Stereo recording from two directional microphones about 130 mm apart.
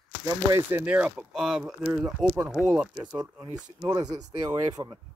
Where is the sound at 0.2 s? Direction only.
25° right (ahead or behind); by 2.9 s 10° right (ahead or behind).